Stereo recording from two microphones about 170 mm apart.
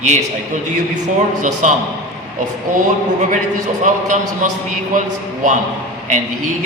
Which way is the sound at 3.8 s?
45° right (ahead or behind).